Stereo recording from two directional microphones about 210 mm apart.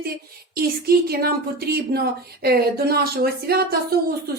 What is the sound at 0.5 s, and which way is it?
Speech, 45° right (ahead or behind).